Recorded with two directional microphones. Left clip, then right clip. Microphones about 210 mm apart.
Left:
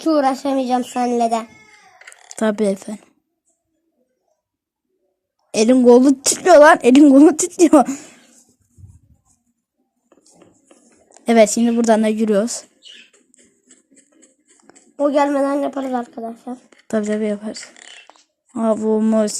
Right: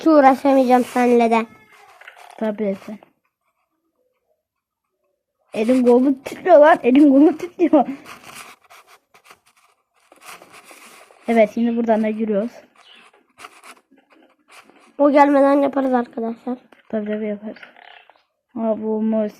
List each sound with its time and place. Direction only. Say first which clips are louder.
0.0 s a woman's voice: right 4 dB; 45° right (ahead or behind)
2.3 s a woman's voice: left 5 dB; 20° left (ahead or behind)
5.5 s a woman's voice: left 4 dB; 25° left (ahead or behind)
11.3 s a woman's voice: left 3 dB; 20° left (ahead or behind)
14.9 s speech: right 3 dB; 40° right (ahead or behind)
16.9 s a woman's voice: left 4 dB; 20° left (ahead or behind)